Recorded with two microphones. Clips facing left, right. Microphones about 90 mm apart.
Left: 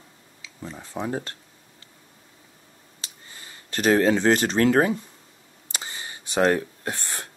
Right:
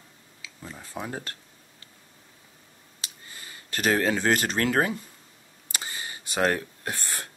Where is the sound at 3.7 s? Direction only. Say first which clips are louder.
Left 5 dB; 20° left (ahead or behind).